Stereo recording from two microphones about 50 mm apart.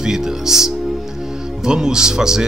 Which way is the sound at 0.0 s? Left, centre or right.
Centre.